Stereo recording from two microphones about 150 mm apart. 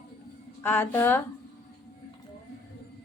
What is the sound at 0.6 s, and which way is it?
Speech, 15° left (ahead or behind).